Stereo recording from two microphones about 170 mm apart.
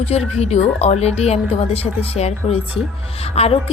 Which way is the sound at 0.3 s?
40° left (ahead or behind).